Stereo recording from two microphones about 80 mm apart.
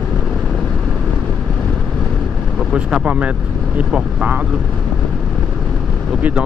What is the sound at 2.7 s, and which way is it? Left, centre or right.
Speech, centre.